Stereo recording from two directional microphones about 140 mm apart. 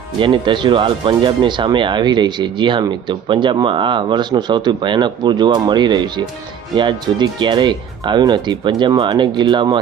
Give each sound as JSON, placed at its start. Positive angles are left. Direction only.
{"t": 0.2, "sound": "speech", "side_deg": -35}